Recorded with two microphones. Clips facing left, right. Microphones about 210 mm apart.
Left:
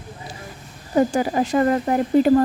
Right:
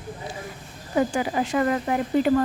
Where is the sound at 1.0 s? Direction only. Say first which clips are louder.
Left 4 dB; 40° left (ahead or behind).